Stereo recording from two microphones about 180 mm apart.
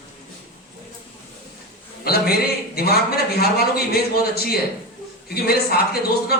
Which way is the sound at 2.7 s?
60° left (ahead or behind).